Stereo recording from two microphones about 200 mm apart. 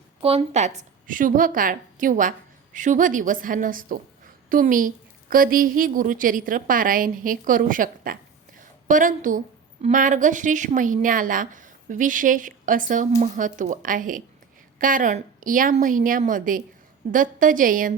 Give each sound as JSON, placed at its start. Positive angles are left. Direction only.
{"t": 0.2, "sound": "a woman's voice", "side_deg": -30}